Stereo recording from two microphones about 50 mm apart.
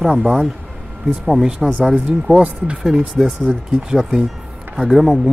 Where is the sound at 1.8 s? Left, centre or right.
Right.